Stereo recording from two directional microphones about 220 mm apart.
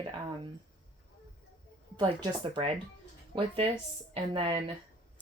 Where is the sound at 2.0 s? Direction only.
20° right (ahead or behind).